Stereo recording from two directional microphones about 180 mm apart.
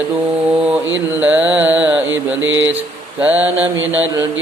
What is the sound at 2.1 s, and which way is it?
Mantra, 90° right.